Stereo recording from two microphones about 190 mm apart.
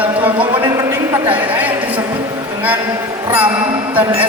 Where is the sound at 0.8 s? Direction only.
10° right (ahead or behind).